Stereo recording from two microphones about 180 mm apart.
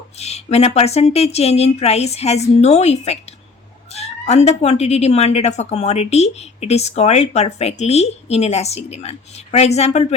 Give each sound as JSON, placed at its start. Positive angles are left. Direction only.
{"t": 0.2, "sound": "speech", "side_deg": 35}